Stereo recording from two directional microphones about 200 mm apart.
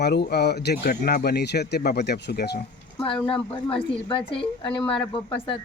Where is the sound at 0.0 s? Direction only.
55° left (ahead or behind).